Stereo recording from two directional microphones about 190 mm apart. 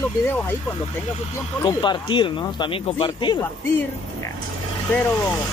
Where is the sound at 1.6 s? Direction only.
25° left (ahead or behind).